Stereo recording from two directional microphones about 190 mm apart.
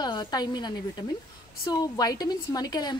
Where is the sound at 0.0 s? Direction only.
25° left (ahead or behind).